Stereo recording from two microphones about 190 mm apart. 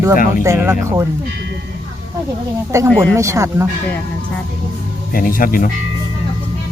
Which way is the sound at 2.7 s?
15° right (ahead or behind).